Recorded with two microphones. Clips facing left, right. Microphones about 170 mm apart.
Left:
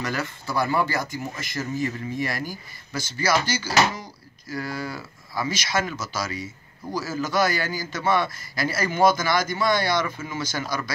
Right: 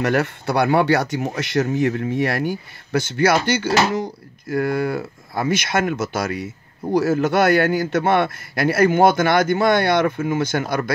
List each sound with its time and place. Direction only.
0.0 s a man's voice: 65° right (ahead or behind)